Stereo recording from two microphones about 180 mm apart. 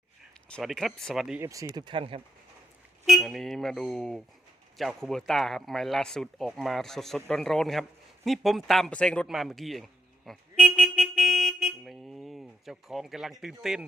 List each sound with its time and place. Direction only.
0.4 s speech: 5° left (ahead or behind)
1.4 s speech: 20° right (ahead or behind)
3.1 s a man's voice: centre (ahead or behind)